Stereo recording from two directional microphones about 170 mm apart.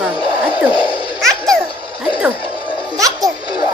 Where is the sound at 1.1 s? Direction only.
Centre (ahead or behind).